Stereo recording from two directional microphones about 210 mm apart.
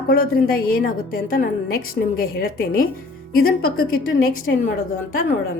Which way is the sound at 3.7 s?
75° left (ahead or behind).